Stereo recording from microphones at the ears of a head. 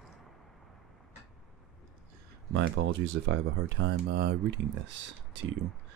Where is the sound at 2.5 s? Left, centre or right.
Right.